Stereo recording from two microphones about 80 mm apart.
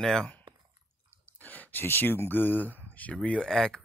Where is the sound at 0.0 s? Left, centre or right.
Centre.